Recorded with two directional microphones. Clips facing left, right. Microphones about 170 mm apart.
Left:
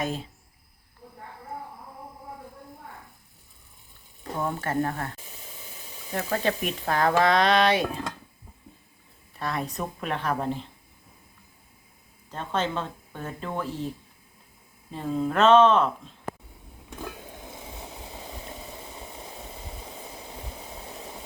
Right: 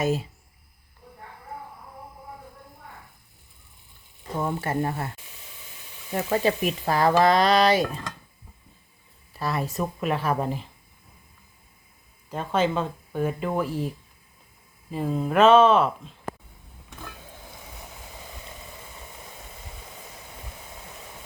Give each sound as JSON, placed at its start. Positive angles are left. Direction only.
{"t": 0.0, "sound": "speech", "side_deg": -5}
{"t": 4.4, "sound": "speech", "side_deg": -10}
{"t": 6.1, "sound": "speech", "side_deg": -5}
{"t": 9.3, "sound": "speech", "side_deg": 0}
{"t": 12.3, "sound": "speech", "side_deg": -10}
{"t": 18.3, "sound": "a sound", "side_deg": 30}
{"t": 20.3, "sound": "vehicle", "side_deg": 30}